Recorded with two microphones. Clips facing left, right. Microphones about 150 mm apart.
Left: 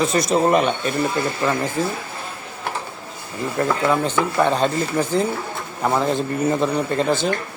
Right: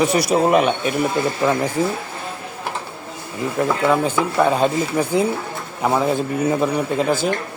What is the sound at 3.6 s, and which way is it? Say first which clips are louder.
Speech: right 2 dB; 5° right (ahead or behind).